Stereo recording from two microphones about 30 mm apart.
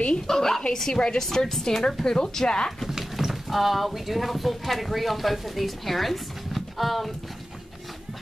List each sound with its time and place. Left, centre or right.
0.3 s speech: centre
2.0 s speech: left
2.9 s speech: centre